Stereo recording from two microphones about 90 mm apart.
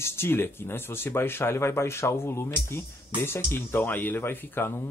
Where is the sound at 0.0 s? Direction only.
25° left (ahead or behind).